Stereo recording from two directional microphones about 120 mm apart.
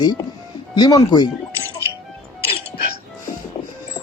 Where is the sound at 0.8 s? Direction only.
35° left (ahead or behind).